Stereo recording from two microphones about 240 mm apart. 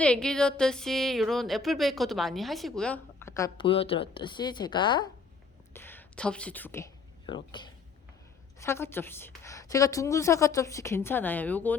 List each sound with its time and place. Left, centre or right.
0.0 s speech: centre
5.7 s a woman's voice: centre
7.3 s a woman's voice: centre